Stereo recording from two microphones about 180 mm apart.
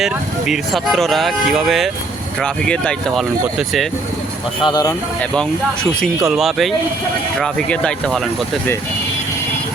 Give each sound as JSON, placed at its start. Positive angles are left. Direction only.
{"t": 0.0, "sound": "speech", "side_deg": 0}
{"t": 4.6, "sound": "speech", "side_deg": 20}
{"t": 5.3, "sound": "speech", "side_deg": 5}